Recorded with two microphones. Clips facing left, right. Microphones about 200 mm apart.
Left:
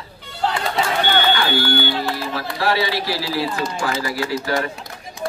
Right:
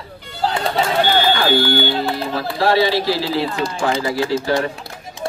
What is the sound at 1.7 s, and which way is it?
A man's voice, 25° right (ahead or behind).